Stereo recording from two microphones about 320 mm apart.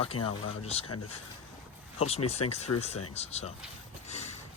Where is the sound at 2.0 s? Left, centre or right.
Centre.